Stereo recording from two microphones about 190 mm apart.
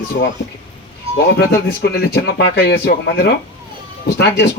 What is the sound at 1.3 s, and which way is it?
A man's voice, 55° left (ahead or behind).